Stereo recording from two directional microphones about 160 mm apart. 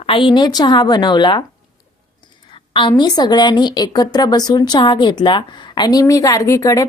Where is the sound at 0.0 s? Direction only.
30° left (ahead or behind).